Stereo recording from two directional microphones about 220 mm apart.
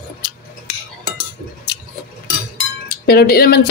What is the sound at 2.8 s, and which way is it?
Wind chime, 45° left (ahead or behind).